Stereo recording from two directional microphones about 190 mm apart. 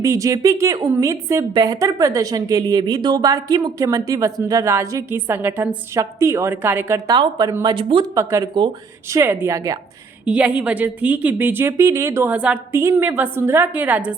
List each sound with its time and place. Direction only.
0.0 s a woman's voice: 15° right (ahead or behind)
8.1 s a woman's voice: 15° right (ahead or behind)